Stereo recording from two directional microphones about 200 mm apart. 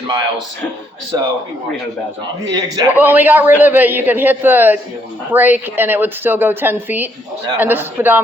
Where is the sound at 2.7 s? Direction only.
10° right (ahead or behind).